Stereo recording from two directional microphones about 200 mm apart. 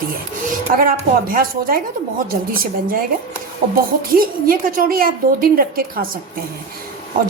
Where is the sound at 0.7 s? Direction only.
45° right (ahead or behind).